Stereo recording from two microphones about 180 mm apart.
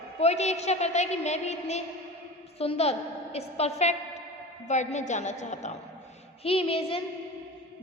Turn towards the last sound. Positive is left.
turn(degrees=30)  # may be behind; listen again after turning